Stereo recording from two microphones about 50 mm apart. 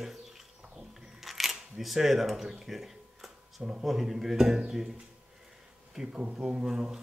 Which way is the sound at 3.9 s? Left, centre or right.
Centre.